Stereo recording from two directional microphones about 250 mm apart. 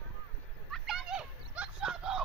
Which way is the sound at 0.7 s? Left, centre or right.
Centre.